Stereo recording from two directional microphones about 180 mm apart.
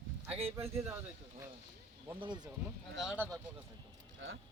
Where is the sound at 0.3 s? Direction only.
35° right (ahead or behind).